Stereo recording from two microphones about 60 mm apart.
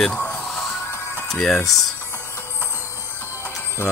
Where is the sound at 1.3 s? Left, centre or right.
Centre.